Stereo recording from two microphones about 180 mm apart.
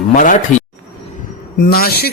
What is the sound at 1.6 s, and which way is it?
Speech, 60° left (ahead or behind).